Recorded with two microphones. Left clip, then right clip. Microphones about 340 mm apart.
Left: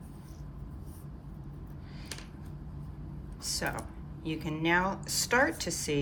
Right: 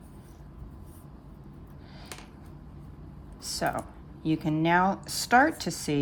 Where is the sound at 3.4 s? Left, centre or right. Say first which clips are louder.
Right 5 dB; centre.